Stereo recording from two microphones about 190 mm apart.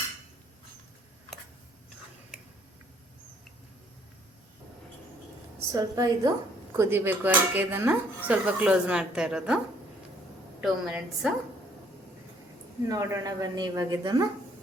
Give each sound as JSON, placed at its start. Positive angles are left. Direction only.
{"t": 5.7, "sound": "a woman's voice", "side_deg": -20}
{"t": 10.6, "sound": "a woman's voice", "side_deg": -5}
{"t": 12.9, "sound": "speech", "side_deg": -15}